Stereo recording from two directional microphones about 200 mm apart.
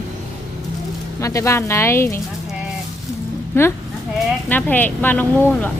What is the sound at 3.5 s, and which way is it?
Speech, 10° left (ahead or behind).